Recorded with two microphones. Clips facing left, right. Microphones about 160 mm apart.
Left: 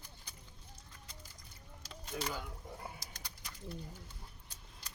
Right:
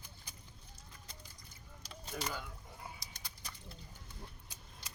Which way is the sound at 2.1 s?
10° left (ahead or behind).